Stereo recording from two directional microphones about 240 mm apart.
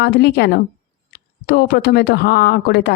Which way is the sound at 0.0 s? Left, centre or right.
Left.